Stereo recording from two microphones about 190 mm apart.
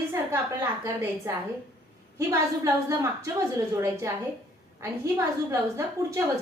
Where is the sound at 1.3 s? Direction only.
15° right (ahead or behind).